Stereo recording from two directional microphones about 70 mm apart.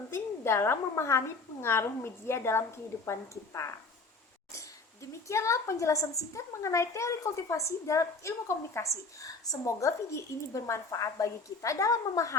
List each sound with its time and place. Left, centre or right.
0.1 s a woman's voice: left
5.3 s a child's voice: left